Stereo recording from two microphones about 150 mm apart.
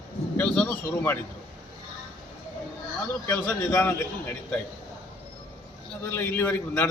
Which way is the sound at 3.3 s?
15° left (ahead or behind).